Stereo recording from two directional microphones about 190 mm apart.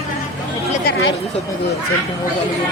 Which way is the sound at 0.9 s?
55° left (ahead or behind).